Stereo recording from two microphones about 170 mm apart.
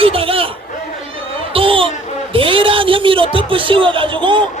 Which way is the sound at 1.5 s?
30° right (ahead or behind).